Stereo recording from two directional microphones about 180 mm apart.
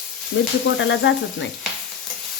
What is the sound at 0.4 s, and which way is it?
Speech, 90° left.